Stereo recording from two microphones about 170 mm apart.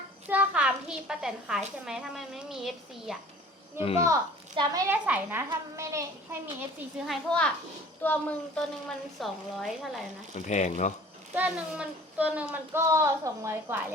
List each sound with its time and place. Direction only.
0.3 s a woman's voice: 10° right (ahead or behind)
3.8 s speech: 35° left (ahead or behind)
4.0 s a woman's voice: 20° right (ahead or behind)
7.0 s a woman's voice: centre (ahead or behind)
10.4 s speech: 45° left (ahead or behind)
11.3 s speech: 5° right (ahead or behind)